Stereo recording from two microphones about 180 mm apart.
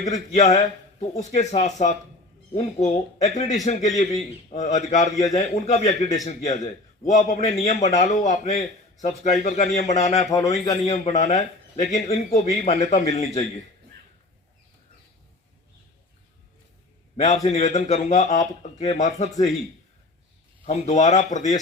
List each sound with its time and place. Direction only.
0.0 s a man's voice: 40° left (ahead or behind)
10.2 s a man's voice: 20° left (ahead or behind)
10.8 s speech: 35° left (ahead or behind)
17.2 s speech: 40° left (ahead or behind)
20.7 s speech: 40° left (ahead or behind)